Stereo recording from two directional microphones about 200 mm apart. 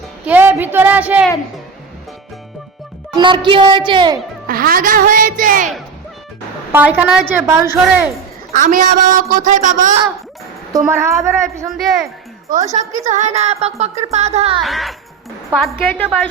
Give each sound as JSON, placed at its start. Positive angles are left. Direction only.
{"t": 0.3, "sound": "a woman's voice", "side_deg": -10}
{"t": 3.2, "sound": "a woman's voice", "side_deg": -25}
{"t": 4.4, "sound": "speech", "side_deg": -45}
{"t": 6.7, "sound": "a woman's voice", "side_deg": -10}
{"t": 8.5, "sound": "music", "side_deg": -40}
{"t": 10.7, "sound": "a woman's voice", "side_deg": -15}
{"t": 11.7, "sound": "speech", "side_deg": 0}
{"t": 12.5, "sound": "music", "side_deg": -35}
{"t": 14.6, "sound": "speech", "side_deg": 0}